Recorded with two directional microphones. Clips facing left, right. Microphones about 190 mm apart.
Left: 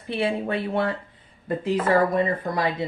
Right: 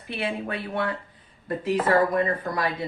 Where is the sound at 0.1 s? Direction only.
30° left (ahead or behind).